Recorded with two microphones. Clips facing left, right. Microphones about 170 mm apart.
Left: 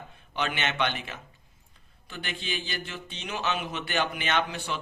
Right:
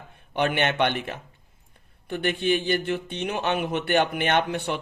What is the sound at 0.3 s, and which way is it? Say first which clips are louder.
Speech: right 6 dB; 55° right (ahead or behind).